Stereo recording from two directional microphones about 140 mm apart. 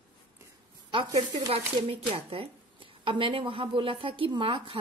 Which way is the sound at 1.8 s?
40° right (ahead or behind).